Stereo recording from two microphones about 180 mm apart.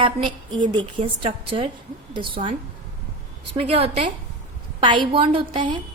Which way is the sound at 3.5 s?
35° right (ahead or behind).